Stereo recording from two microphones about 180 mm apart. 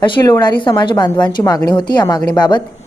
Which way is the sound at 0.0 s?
25° left (ahead or behind).